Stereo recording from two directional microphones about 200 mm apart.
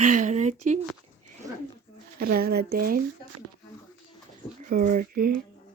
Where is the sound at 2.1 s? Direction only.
50° right (ahead or behind).